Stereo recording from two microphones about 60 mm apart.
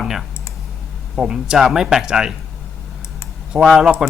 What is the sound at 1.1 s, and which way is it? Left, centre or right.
Speech, centre.